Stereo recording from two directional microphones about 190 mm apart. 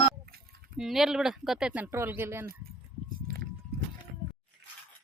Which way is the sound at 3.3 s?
50° right (ahead or behind).